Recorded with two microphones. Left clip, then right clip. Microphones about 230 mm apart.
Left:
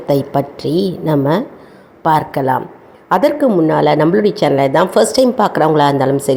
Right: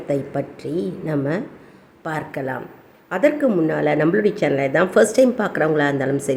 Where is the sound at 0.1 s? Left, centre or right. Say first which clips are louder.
Left 9 dB; centre.